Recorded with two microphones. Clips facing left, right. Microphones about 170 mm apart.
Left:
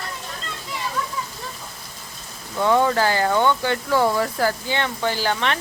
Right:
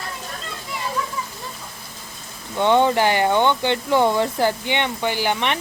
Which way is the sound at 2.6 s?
25° right (ahead or behind).